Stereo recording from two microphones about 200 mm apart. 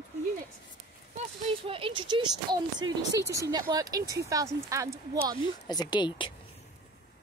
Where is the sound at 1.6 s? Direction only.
25° right (ahead or behind).